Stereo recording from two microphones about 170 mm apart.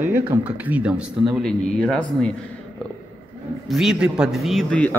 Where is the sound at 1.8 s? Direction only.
5° left (ahead or behind).